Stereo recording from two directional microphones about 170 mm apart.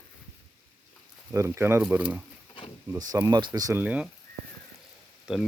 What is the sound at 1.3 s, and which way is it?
Speech, 15° right (ahead or behind).